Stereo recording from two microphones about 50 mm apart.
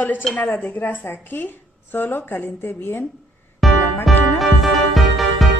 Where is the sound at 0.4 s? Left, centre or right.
Left.